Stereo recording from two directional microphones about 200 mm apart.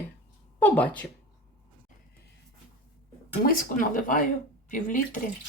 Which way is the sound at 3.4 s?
45° left (ahead or behind).